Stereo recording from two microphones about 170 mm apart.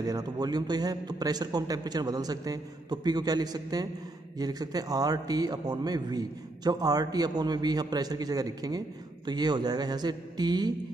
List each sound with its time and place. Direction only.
0.0 s a man's voice: 20° right (ahead or behind)